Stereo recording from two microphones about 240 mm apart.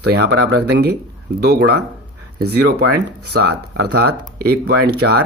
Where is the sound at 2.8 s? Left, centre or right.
Right.